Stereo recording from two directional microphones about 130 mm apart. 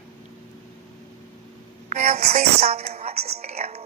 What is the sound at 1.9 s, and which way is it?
A woman's voice, 55° right (ahead or behind).